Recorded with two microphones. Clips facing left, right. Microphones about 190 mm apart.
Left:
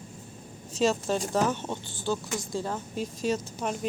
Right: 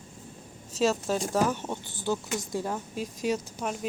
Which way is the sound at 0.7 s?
5° right (ahead or behind).